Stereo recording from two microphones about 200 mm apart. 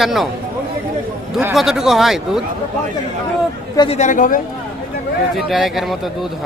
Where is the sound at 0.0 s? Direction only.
Centre (ahead or behind).